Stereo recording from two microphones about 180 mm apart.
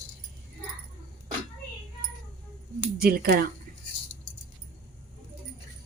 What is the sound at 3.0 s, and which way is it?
Speech, 55° right (ahead or behind).